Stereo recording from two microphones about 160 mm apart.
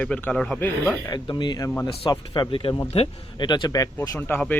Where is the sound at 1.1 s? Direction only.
25° left (ahead or behind).